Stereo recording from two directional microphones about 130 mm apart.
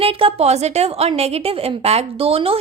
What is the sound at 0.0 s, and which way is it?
A woman's voice, 45° right (ahead or behind).